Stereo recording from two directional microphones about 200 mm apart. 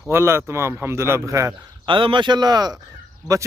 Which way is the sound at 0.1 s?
10° right (ahead or behind).